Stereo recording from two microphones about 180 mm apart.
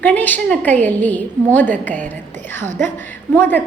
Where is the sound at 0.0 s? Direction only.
10° left (ahead or behind).